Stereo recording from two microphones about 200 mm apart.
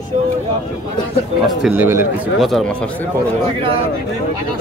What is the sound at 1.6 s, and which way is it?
Speech, 10° right (ahead or behind).